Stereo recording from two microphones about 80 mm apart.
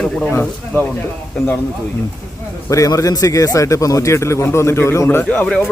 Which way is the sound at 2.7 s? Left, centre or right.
Left.